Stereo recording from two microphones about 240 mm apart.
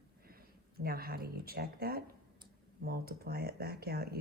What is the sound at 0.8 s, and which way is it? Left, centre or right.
Speech, right.